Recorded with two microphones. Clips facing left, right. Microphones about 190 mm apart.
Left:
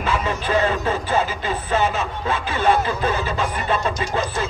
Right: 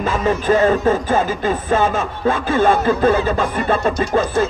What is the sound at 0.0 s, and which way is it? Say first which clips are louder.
Music: right 5 dB; 45° right (ahead or behind).